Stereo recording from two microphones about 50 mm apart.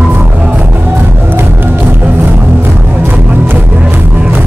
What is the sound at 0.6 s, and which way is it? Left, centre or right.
Music, right.